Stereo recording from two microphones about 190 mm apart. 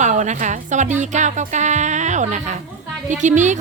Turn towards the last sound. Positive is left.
turn(degrees=-40)  # may be behind; listen again after turning